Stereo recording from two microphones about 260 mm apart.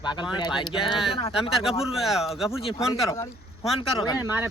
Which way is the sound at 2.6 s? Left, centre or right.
Centre.